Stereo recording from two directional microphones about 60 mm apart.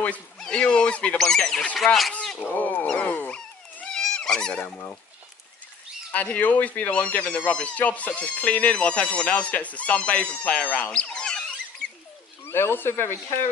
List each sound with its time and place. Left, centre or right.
0.5 s speech: centre
1.1 s speech: centre
2.5 s speech: left
3.9 s a sound: centre
6.1 s speech: left
10.9 s a sound: centre
12.4 s speech: left